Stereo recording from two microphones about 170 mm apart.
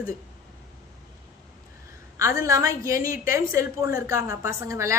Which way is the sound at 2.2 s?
20° right (ahead or behind).